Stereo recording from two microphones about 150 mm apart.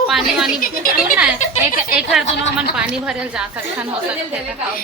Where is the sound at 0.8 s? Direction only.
70° left (ahead or behind).